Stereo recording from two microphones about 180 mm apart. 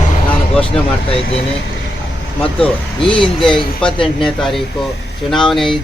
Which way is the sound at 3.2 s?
Centre (ahead or behind).